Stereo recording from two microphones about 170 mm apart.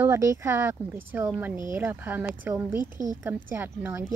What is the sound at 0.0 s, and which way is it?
Speech, 15° right (ahead or behind).